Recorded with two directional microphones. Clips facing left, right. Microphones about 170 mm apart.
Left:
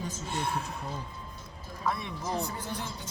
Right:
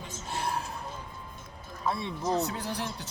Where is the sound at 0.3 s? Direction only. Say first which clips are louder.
Right 1 dB; 35° right (ahead or behind).